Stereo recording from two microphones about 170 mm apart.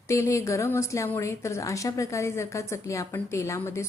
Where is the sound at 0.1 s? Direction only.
15° left (ahead or behind).